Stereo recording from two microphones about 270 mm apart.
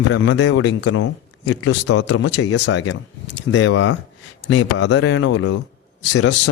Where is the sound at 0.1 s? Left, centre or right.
Left.